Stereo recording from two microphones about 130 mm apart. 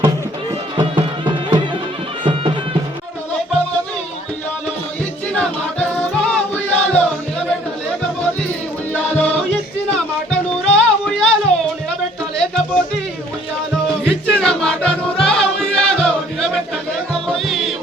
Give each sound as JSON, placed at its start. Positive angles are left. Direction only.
{"t": 0.8, "sound": "music", "side_deg": -35}
{"t": 6.2, "sound": "music", "side_deg": 10}
{"t": 8.9, "sound": "music", "side_deg": 10}
{"t": 14.0, "sound": "music", "side_deg": 5}